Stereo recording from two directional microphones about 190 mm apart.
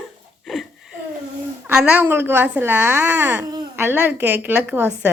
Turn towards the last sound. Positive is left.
turn(degrees=-10)  # may be behind; listen again after turning